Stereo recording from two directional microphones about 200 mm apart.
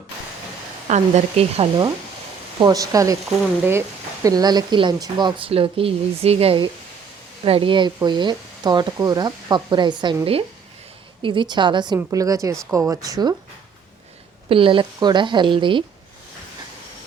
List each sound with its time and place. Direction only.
0.9 s speech: 35° right (ahead or behind)
2.6 s speech: 20° right (ahead or behind)
14.5 s speech: 25° right (ahead or behind)